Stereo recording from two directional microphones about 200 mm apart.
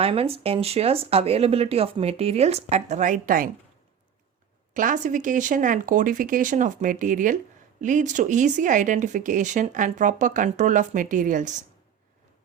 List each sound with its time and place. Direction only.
0.0 s speech: 30° right (ahead or behind); by 3.5 s 45° right (ahead or behind)
4.7 s speech: 40° right (ahead or behind)